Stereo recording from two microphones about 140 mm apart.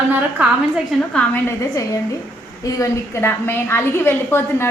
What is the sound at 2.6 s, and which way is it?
A woman's voice, 25° left (ahead or behind).